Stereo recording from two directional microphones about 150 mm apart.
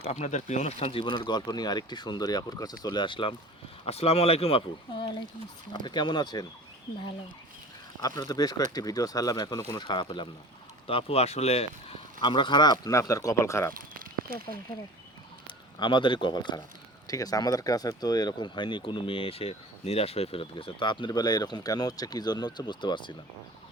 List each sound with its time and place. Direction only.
0.0 s speech: 50° left (ahead or behind); by 6.5 s 25° left (ahead or behind)
8.0 s speech: 25° left (ahead or behind)
13.7 s a sound: 70° right (ahead or behind)
15.8 s speech: 35° left (ahead or behind)